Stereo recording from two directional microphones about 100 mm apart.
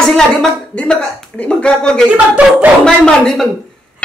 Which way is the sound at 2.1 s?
15° right (ahead or behind).